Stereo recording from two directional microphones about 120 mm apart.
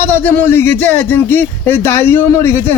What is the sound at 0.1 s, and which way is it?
A man's voice, 15° left (ahead or behind).